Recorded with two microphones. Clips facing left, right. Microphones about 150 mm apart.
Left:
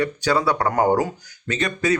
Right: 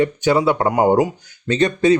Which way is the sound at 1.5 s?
30° right (ahead or behind).